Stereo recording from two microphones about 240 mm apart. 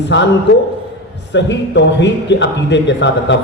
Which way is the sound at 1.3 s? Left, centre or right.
Left.